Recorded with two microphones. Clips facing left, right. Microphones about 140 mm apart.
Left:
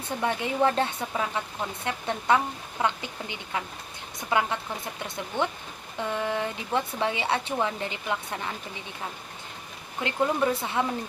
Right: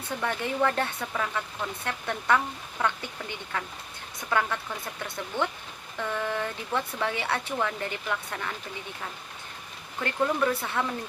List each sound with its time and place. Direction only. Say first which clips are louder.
0.2 s speech: left 2 dB; 20° left (ahead or behind)
10.0 s speech: left 1 dB; 20° left (ahead or behind)